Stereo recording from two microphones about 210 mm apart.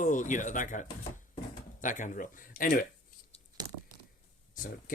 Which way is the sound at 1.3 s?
35° left (ahead or behind).